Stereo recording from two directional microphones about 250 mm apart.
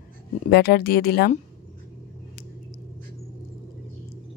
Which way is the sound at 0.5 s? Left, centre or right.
Left.